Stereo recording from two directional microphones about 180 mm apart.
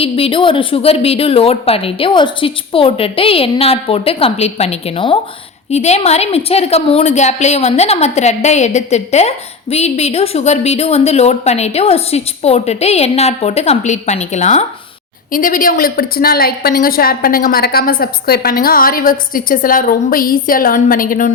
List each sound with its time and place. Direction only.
0.0 s a woman's voice: 30° left (ahead or behind); by 21.3 s 45° left (ahead or behind)